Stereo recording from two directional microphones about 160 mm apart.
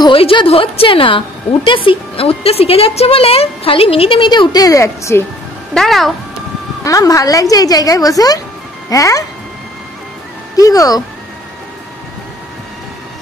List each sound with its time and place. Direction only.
0.0 s a woman's voice: 35° left (ahead or behind); by 5.2 s 20° left (ahead or behind)
5.8 s speech: centre (ahead or behind)
6.8 s a woman's voice: 20° left (ahead or behind)
10.5 s speech: 20° left (ahead or behind)